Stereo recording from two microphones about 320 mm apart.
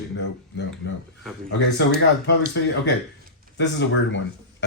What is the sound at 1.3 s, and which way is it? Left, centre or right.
Speech, centre.